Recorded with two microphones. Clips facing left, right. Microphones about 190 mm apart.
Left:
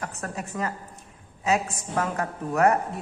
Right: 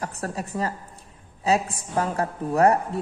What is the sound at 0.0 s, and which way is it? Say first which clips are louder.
A woman's voice: right 3 dB; 35° right (ahead or behind).